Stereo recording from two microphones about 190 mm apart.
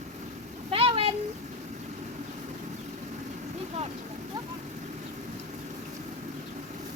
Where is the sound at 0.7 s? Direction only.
30° right (ahead or behind).